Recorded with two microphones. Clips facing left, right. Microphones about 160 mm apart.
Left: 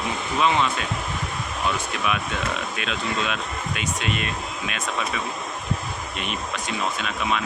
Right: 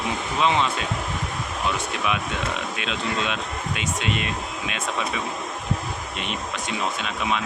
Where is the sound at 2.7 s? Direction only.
25° right (ahead or behind).